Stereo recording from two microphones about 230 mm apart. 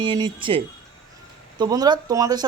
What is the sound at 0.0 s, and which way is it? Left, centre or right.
Speech, right.